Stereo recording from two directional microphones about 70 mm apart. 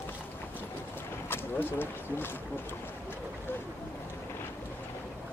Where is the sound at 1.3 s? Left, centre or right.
Left.